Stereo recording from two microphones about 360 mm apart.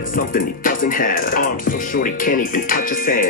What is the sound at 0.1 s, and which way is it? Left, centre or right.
Music, left.